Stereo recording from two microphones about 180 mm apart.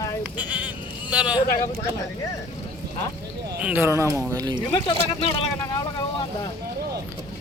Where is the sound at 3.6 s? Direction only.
15° right (ahead or behind).